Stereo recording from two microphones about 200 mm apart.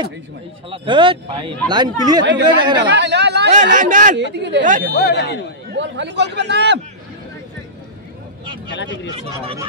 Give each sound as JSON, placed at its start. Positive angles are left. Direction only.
{"t": 0.7, "sound": "speech", "side_deg": -25}
{"t": 2.9, "sound": "a man's voice", "side_deg": -60}
{"t": 3.7, "sound": "speech", "side_deg": -40}
{"t": 4.2, "sound": "a man's voice", "side_deg": -60}
{"t": 4.6, "sound": "speech", "side_deg": -40}
{"t": 4.9, "sound": "speech", "side_deg": 55}
{"t": 5.7, "sound": "a man's voice", "side_deg": -60}
{"t": 8.6, "sound": "speech", "side_deg": 60}
{"t": 9.1, "sound": "speech", "side_deg": -30}